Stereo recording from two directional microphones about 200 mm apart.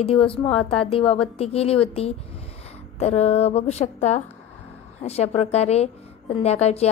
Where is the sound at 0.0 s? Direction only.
30° left (ahead or behind).